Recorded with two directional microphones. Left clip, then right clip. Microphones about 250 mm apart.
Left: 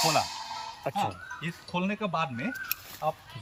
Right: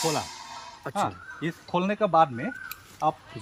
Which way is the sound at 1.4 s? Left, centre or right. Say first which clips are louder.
Right 6 dB; right.